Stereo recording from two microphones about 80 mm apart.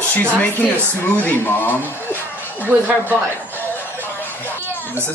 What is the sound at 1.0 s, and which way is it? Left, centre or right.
Speech, left.